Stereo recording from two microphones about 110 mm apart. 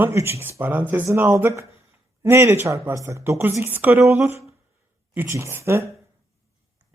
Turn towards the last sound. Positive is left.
turn(degrees=-25)  # may be behind; listen again after turning